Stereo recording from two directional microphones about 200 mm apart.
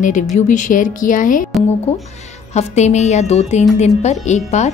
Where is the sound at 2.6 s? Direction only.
35° left (ahead or behind).